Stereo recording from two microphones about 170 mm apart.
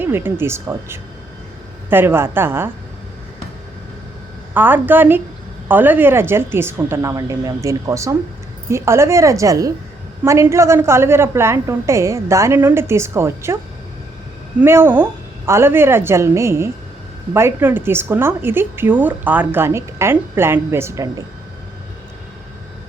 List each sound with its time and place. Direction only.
0.0 s a woman's voice: 10° right (ahead or behind)
4.5 s a woman's voice: 10° right (ahead or behind)
14.6 s a woman's voice: 15° right (ahead or behind)